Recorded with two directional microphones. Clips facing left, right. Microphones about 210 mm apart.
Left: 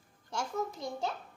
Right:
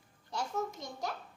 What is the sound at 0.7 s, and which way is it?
Speech, 30° left (ahead or behind).